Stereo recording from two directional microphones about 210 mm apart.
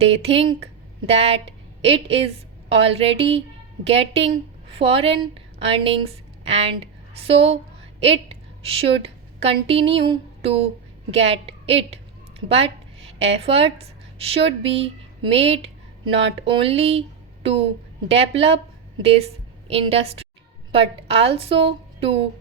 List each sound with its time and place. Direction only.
0.1 s a woman's voice: 30° right (ahead or behind)
13.1 s a woman's voice: 30° right (ahead or behind)